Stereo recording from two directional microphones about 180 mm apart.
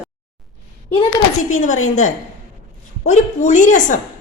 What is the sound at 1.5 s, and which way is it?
A woman's voice, 45° left (ahead or behind).